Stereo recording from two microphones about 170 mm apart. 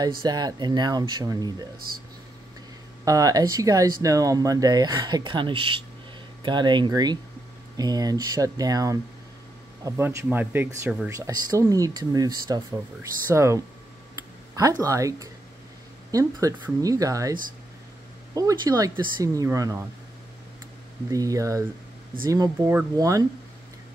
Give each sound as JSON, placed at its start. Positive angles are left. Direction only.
{"t": 0.2, "sound": "speech", "side_deg": -25}
{"t": 3.1, "sound": "speech", "side_deg": -20}
{"t": 14.1, "sound": "a sound", "side_deg": -20}
{"t": 16.1, "sound": "speech", "side_deg": -20}
{"t": 21.1, "sound": "speech", "side_deg": -20}